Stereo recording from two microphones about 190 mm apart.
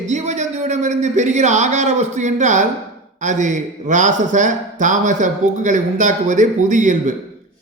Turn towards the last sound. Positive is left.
turn(degrees=-40)  # may be behind; listen again after turning